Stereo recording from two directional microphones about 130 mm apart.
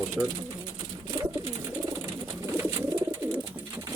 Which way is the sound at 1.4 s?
25° right (ahead or behind).